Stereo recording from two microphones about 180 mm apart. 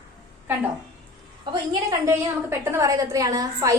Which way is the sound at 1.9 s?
15° right (ahead or behind).